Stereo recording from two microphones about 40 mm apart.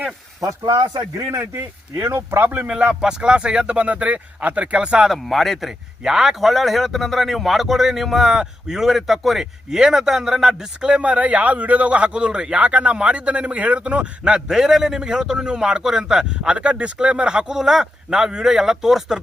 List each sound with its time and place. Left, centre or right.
1.4 s speech: right
2.5 s speech: right
2.7 s a man's voice: right
5.1 s speech: centre
8.3 s a man's voice: centre
8.8 s a man's voice: centre
10.8 s a man's voice: right
14.5 s a man's voice: centre
16.5 s a man's voice: right
17.6 s a man's voice: centre